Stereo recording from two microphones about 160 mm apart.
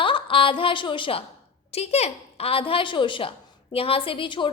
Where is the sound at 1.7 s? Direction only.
40° left (ahead or behind).